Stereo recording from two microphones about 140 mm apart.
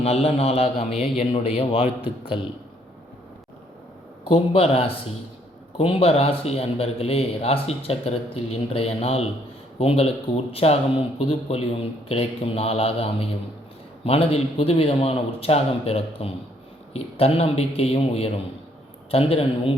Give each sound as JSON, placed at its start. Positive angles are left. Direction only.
{"t": 0.0, "sound": "a man's voice", "side_deg": 45}
{"t": 4.3, "sound": "a man's voice", "side_deg": 40}